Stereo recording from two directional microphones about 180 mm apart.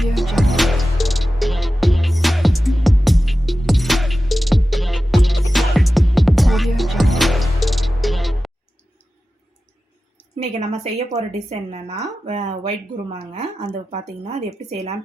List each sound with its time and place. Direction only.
0.0 s music: centre (ahead or behind)
10.6 s speech: 35° right (ahead or behind)